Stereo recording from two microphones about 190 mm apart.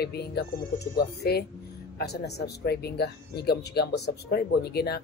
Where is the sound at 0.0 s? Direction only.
60° left (ahead or behind).